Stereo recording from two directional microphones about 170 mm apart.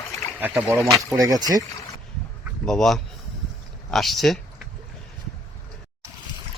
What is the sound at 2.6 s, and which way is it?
Speech, 5° left (ahead or behind).